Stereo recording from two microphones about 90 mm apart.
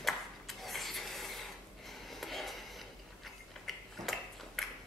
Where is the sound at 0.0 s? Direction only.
Centre (ahead or behind).